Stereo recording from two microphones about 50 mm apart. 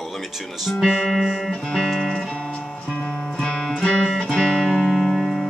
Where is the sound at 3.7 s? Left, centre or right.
Centre.